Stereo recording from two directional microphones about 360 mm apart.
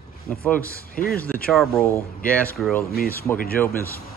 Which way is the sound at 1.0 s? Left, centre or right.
Centre.